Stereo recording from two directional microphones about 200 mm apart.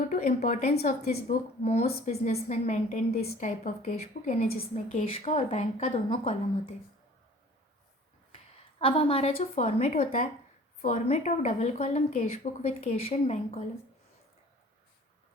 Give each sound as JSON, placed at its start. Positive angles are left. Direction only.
{"t": 0.1, "sound": "a woman's voice", "side_deg": 40}
{"t": 8.8, "sound": "a woman's voice", "side_deg": 25}